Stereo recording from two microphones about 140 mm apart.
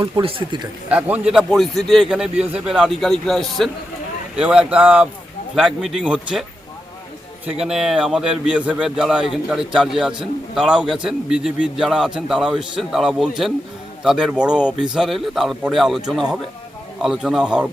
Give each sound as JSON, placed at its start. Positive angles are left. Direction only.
{"t": 0.0, "sound": "speech", "side_deg": -40}
{"t": 0.9, "sound": "a man's voice", "side_deg": -10}
{"t": 7.4, "sound": "a man's voice", "side_deg": -5}